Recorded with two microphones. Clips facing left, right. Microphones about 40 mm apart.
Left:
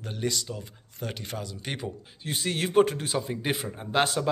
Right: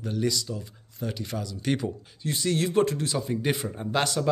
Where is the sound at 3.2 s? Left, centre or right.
Centre.